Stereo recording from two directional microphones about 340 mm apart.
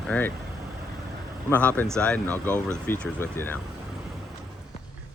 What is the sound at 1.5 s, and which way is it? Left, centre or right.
Speech, centre.